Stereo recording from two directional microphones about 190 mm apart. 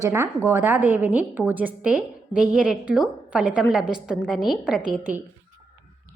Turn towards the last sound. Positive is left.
turn(degrees=-5)  # may be behind; listen again after turning